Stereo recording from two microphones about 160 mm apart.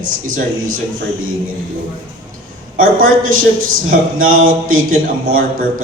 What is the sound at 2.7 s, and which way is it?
Speech, 60° right (ahead or behind).